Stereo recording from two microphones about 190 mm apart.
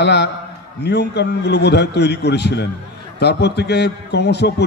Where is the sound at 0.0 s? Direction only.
60° left (ahead or behind).